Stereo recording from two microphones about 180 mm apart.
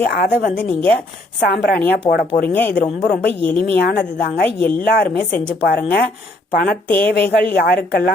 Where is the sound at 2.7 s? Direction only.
60° left (ahead or behind).